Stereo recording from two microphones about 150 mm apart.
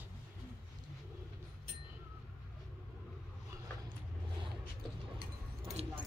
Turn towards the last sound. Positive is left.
turn(degrees=-40)  # may be behind; listen again after turning